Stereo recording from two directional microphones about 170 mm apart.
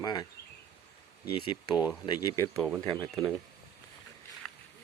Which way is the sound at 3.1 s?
Centre (ahead or behind).